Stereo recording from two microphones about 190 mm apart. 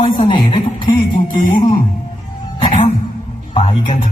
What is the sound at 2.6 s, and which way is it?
Music, 30° left (ahead or behind).